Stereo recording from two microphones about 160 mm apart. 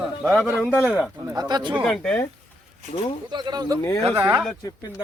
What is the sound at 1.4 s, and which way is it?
Speech, 25° right (ahead or behind).